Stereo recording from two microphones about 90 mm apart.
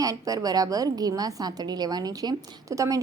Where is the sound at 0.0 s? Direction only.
40° right (ahead or behind).